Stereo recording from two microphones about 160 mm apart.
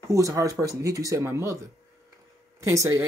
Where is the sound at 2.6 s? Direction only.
20° right (ahead or behind).